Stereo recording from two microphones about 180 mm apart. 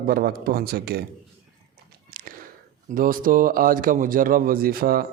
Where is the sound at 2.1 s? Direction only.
50° right (ahead or behind).